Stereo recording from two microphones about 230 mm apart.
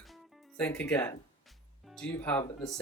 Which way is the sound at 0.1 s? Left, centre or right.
Centre.